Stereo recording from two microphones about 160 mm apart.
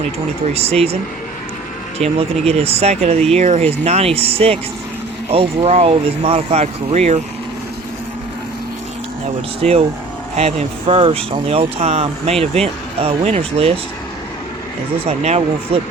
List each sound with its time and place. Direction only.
0.4 s speech: 40° right (ahead or behind)
2.5 s speech: 40° right (ahead or behind)
9.6 s speech: 40° right (ahead or behind)
15.0 s speech: 40° right (ahead or behind)